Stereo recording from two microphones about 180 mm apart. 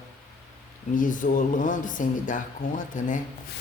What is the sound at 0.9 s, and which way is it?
Speech, 45° left (ahead or behind).